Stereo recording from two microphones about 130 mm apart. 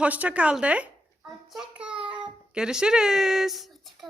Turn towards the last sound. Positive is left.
turn(degrees=0)  # may be behind; listen again after turning